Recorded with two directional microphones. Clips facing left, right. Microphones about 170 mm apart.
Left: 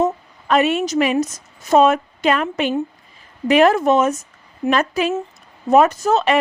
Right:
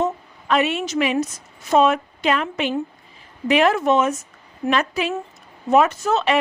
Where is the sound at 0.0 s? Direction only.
45° left (ahead or behind).